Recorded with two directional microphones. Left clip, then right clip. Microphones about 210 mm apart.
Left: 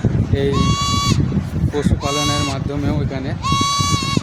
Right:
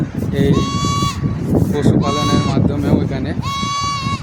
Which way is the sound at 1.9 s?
55° left (ahead or behind).